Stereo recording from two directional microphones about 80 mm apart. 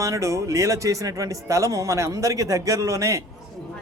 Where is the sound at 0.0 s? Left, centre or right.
Right.